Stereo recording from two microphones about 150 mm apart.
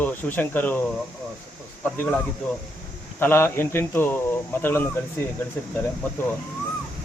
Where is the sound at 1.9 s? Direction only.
10° left (ahead or behind).